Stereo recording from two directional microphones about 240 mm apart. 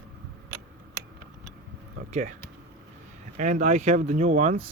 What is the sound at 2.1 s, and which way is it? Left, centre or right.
Speech, right.